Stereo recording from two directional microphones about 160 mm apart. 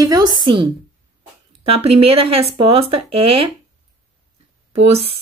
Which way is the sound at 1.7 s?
40° right (ahead or behind).